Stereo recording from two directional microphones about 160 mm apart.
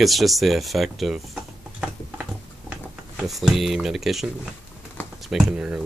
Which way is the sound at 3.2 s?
Centre (ahead or behind).